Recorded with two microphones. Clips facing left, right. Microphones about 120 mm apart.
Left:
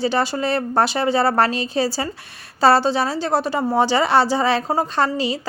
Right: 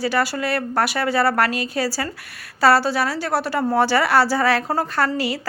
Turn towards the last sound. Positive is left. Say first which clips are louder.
# left 1 dB
turn(degrees=20)  # may be behind; listen again after turning